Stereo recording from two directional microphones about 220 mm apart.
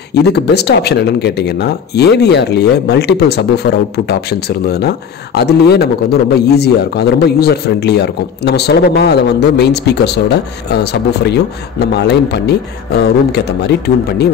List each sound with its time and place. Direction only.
0.1 s speech: 50° left (ahead or behind)